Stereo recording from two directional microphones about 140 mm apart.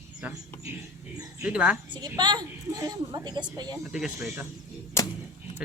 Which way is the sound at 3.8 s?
5° right (ahead or behind).